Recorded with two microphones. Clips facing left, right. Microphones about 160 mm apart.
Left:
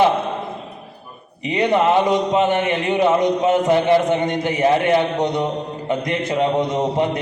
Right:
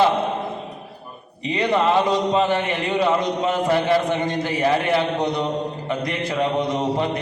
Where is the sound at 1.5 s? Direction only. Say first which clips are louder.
Left 3 dB; 20° left (ahead or behind).